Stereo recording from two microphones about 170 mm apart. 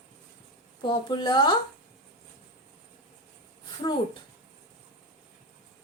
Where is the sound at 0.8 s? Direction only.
30° left (ahead or behind).